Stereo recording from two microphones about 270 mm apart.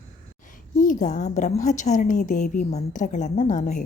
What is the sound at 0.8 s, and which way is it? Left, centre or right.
A woman's voice, left.